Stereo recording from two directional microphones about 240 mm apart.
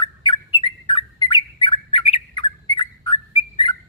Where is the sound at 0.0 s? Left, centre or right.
Centre.